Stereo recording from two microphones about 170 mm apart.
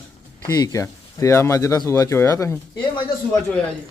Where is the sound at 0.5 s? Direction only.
20° left (ahead or behind).